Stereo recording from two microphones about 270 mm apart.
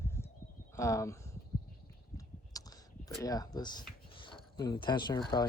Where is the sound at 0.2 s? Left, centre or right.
Centre.